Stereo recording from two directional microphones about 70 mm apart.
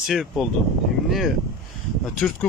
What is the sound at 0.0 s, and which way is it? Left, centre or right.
Speech, centre.